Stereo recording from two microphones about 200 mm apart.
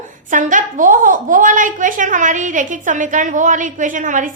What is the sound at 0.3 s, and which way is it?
A woman's voice, 40° right (ahead or behind).